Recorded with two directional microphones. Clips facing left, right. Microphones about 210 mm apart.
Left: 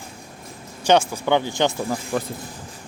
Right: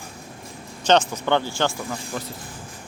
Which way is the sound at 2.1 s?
55° left (ahead or behind).